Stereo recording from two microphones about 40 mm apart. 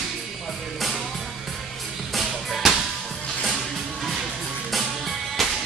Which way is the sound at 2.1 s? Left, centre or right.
Centre.